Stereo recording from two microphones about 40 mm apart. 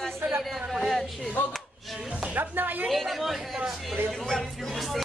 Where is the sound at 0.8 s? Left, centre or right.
Centre.